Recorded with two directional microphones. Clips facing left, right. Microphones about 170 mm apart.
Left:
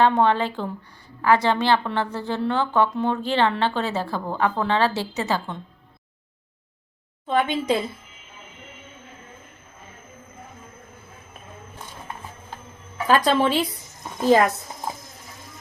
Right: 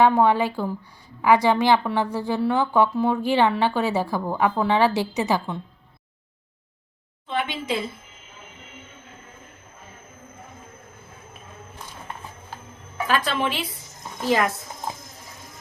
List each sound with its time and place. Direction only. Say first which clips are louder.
0.0 s a woman's voice: right 1 dB; 10° right (ahead or behind)
7.3 s a woman's voice: left 5 dB; 45° left (ahead or behind)
13.1 s speech: left 5 dB; 40° left (ahead or behind)